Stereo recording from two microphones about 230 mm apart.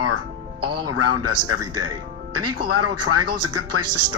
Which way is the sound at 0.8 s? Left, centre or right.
Right.